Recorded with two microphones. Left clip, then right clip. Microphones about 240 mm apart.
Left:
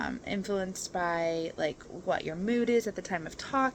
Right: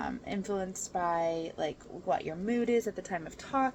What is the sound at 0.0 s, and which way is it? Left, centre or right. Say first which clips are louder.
Speech: left 2 dB; left.